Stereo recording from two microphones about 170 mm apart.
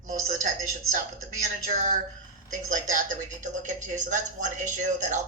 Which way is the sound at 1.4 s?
50° right (ahead or behind).